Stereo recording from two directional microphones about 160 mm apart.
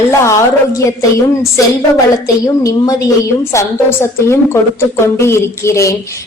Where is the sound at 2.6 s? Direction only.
20° left (ahead or behind).